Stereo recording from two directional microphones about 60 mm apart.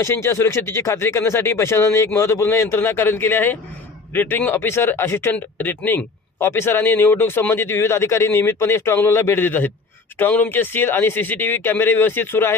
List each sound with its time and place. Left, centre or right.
0.0 s a man's voice: left
2.7 s speech: left
5.3 s speech: left
7.6 s speech: left